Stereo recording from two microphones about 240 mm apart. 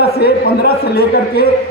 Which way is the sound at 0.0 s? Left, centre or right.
Left.